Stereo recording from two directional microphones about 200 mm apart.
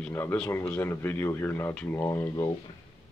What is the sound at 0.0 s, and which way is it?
Speech, 10° left (ahead or behind).